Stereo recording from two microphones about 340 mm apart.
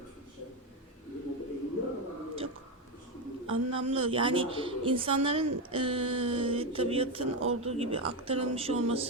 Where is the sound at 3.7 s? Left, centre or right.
Centre.